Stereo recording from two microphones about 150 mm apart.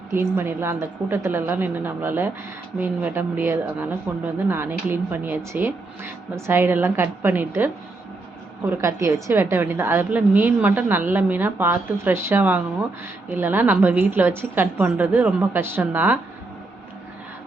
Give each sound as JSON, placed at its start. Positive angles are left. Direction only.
{"t": 0.1, "sound": "a woman's voice", "side_deg": -15}